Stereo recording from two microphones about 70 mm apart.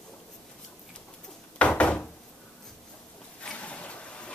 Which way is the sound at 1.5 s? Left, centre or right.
Centre.